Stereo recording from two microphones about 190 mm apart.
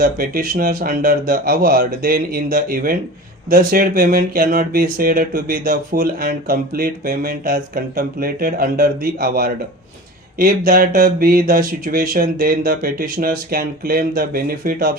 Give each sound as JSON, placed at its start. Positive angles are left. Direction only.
{"t": 0.0, "sound": "speech", "side_deg": -50}